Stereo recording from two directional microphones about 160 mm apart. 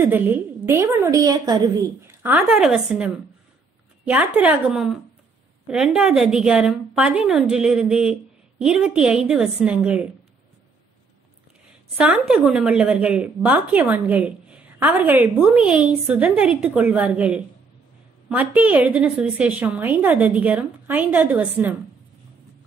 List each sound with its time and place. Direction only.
0.0 s a woman's voice: 15° right (ahead or behind)
2.0 s a woman's voice: 15° right (ahead or behind)
2.5 s a woman's voice: centre (ahead or behind)
5.9 s a woman's voice: 5° right (ahead or behind)
12.0 s a woman's voice: 5° right (ahead or behind)